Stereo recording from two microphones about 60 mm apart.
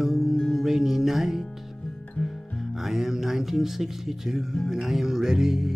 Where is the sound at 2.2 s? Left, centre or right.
Centre.